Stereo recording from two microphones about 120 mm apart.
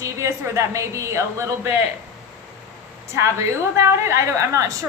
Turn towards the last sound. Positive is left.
turn(degrees=-25)  # may be behind; listen again after turning